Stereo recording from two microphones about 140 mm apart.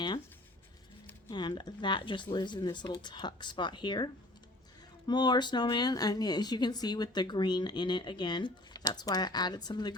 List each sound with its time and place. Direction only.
1.3 s speech: 30° left (ahead or behind)